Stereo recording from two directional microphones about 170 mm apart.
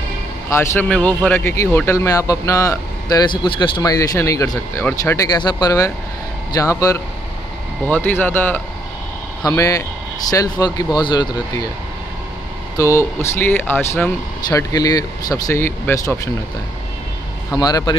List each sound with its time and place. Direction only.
0.5 s speech: 15° left (ahead or behind)
12.7 s speech: 15° left (ahead or behind)
14.5 s speech: 20° left (ahead or behind)
17.5 s speech: 20° left (ahead or behind)